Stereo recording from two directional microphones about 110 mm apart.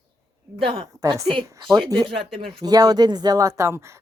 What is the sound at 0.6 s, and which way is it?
Speech, 55° right (ahead or behind).